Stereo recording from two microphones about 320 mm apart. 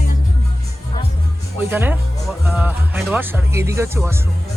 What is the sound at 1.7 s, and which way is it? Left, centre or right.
Speech, centre.